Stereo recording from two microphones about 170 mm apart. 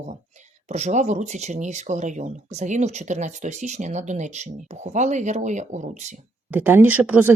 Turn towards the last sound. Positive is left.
turn(degrees=-10)  # may be behind; listen again after turning